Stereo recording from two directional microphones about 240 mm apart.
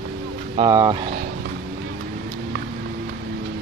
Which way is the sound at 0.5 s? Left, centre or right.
Centre.